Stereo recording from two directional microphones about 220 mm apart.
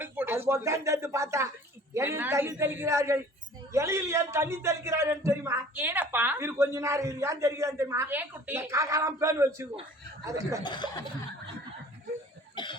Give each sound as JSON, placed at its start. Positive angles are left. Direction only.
{"t": 0.0, "sound": "a man's voice", "side_deg": -10}
{"t": 10.6, "sound": "speech", "side_deg": 20}